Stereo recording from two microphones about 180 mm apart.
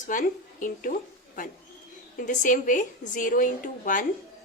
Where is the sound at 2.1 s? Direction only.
45° left (ahead or behind).